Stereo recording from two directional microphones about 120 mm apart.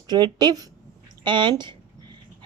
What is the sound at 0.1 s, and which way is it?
A woman's voice, 35° right (ahead or behind).